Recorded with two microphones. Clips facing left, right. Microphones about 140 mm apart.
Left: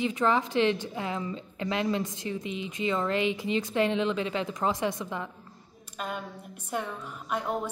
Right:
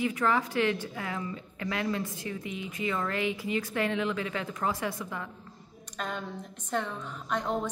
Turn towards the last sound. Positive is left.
turn(degrees=5)  # may be behind; listen again after turning